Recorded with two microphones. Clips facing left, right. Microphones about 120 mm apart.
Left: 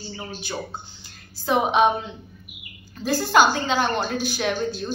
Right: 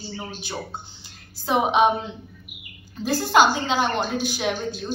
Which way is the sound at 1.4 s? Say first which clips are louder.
Even; 20° right (ahead or behind).